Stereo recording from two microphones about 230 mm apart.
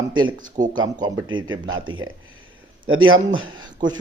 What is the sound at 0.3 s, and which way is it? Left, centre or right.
Speech, right.